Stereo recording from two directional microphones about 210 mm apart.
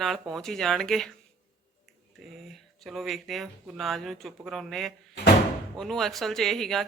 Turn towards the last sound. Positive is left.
turn(degrees=0)  # may be behind; listen again after turning